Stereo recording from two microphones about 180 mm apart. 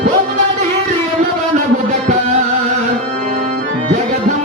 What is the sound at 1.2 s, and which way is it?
Music, 40° right (ahead or behind).